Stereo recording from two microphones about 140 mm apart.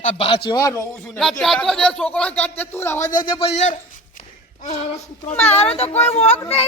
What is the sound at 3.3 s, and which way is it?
Speech, 45° left (ahead or behind).